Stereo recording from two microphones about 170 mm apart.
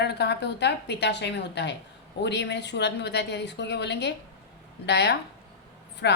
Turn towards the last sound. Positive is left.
turn(degrees=85)